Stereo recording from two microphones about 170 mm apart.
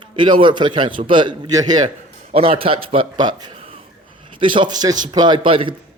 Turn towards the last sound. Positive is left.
turn(degrees=-30)  # may be behind; listen again after turning